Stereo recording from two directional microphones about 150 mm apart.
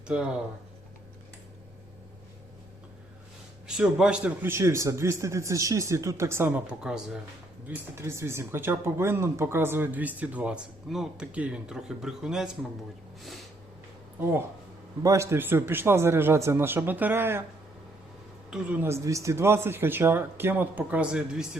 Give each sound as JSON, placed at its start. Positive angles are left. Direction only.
{"t": 3.7, "sound": "a man's voice", "side_deg": -5}
{"t": 7.7, "sound": "speech", "side_deg": -15}
{"t": 15.0, "sound": "speech", "side_deg": -20}
{"t": 18.5, "sound": "speech", "side_deg": -10}